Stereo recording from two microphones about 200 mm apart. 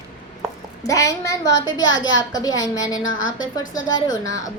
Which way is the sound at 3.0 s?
75° left (ahead or behind).